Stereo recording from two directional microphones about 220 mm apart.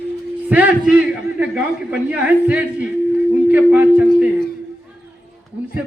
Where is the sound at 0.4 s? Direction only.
5° right (ahead or behind).